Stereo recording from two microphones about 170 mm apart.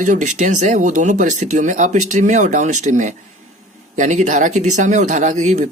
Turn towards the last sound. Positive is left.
turn(degrees=-40)  # may be behind; listen again after turning